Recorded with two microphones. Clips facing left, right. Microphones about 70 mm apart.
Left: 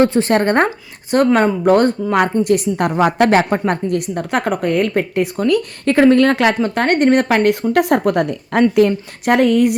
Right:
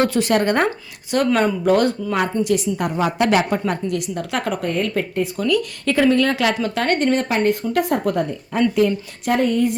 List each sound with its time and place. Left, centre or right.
0.0 s speech: left
2.2 s speech: left
3.2 s speech: left
8.9 s speech: left